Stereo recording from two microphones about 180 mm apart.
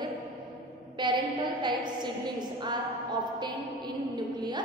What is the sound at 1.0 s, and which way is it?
A woman's voice, 25° right (ahead or behind).